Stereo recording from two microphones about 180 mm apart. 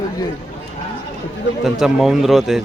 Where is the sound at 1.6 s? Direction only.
Centre (ahead or behind).